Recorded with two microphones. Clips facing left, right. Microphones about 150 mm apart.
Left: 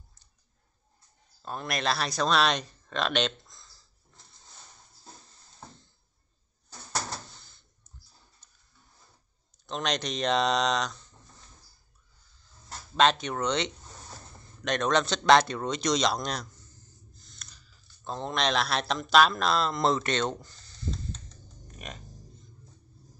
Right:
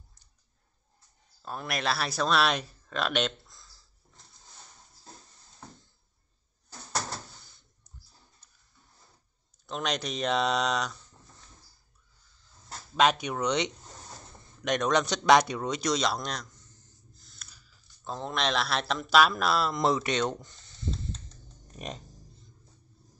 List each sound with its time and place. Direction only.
1.4 s speech: 5° right (ahead or behind)
7.2 s door: 10° right (ahead or behind)
8.4 s a sound: 10° right (ahead or behind)
9.7 s speech: 5° right (ahead or behind)
12.9 s speech: 10° right (ahead or behind)
21.7 s music: 35° right (ahead or behind)